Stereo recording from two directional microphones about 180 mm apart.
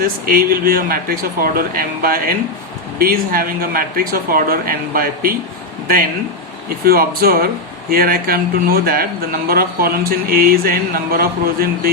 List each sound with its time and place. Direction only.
0.0 s a man's voice: 55° right (ahead or behind)
6.8 s speech: 55° right (ahead or behind)